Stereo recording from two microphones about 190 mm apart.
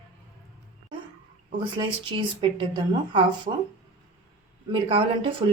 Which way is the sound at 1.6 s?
25° right (ahead or behind).